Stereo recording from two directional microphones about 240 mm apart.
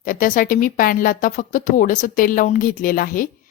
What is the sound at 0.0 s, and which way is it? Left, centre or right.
A woman's voice, left.